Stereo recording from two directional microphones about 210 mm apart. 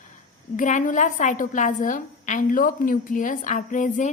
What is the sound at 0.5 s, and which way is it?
A woman's voice, 35° left (ahead or behind).